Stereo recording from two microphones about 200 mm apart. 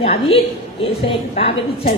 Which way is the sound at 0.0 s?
30° left (ahead or behind).